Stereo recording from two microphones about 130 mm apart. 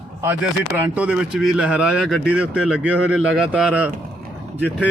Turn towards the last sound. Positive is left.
turn(degrees=-15)  # may be behind; listen again after turning